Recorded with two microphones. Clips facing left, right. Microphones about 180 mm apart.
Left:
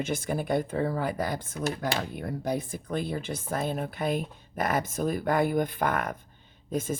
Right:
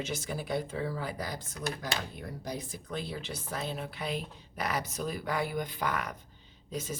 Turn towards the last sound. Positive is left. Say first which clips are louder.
# left 7 dB
turn(degrees=50)  # may be behind; listen again after turning